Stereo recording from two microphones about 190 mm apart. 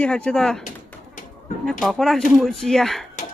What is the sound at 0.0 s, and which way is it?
Speech, 5° left (ahead or behind).